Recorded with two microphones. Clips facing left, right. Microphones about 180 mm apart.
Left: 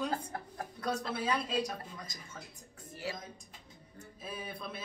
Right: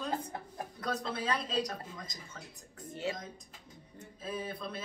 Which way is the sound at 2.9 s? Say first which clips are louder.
Right 4 dB; 25° right (ahead or behind).